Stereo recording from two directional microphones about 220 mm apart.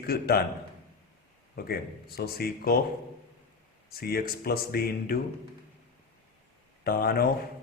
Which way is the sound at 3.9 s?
45° left (ahead or behind).